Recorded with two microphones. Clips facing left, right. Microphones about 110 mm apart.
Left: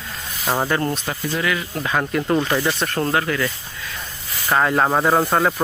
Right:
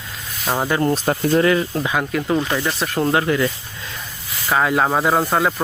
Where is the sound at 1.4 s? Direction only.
35° right (ahead or behind).